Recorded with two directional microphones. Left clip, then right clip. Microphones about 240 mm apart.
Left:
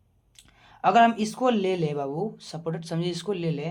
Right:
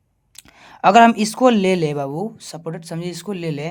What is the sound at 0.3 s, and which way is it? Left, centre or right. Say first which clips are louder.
Speech: right 9 dB; right.